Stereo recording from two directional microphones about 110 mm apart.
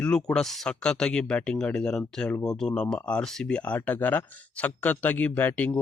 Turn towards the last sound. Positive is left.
turn(degrees=15)  # may be behind; listen again after turning